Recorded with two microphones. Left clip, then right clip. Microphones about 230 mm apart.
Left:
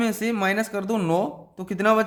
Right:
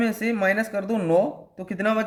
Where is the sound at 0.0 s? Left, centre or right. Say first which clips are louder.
Right 1 dB; left.